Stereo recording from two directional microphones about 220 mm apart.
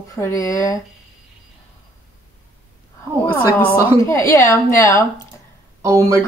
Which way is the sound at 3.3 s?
10° left (ahead or behind).